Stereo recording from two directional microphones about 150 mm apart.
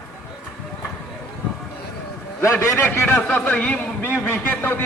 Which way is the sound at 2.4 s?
15° left (ahead or behind).